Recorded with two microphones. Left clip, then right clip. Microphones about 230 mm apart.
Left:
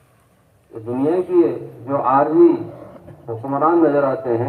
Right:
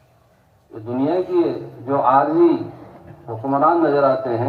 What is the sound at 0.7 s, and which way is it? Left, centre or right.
A man's voice, right.